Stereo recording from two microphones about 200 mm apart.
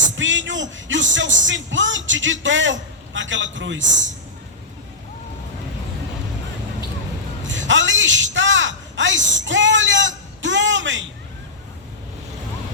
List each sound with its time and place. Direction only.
0.2 s speech: 70° right (ahead or behind)
7.4 s a man's voice: 70° right (ahead or behind)